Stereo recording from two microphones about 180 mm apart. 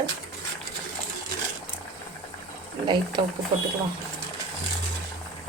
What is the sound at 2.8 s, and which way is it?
Speech, 25° right (ahead or behind).